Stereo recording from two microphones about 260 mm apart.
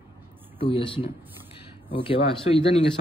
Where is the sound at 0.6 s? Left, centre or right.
Centre.